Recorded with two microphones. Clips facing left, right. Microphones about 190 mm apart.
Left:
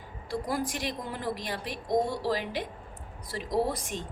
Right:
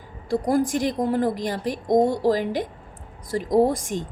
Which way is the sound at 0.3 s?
50° right (ahead or behind).